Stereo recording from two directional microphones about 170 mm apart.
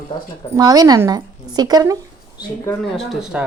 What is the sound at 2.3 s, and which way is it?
Speech, 15° left (ahead or behind).